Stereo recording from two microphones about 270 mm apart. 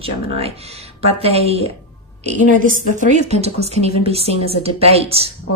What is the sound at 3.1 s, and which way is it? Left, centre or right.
A woman's voice, right.